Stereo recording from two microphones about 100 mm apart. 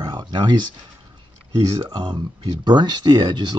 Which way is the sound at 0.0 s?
50° right (ahead or behind).